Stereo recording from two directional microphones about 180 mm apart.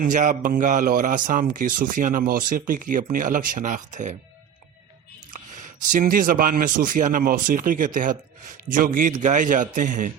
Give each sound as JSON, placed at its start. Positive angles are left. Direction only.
{"t": 0.0, "sound": "a man's voice", "side_deg": -45}
{"t": 5.3, "sound": "a man's voice", "side_deg": -45}